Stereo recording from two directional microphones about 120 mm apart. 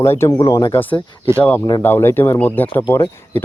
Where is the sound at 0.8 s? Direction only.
15° left (ahead or behind).